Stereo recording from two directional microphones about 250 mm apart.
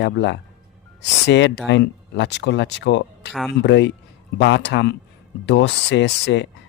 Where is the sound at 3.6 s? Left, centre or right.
Left.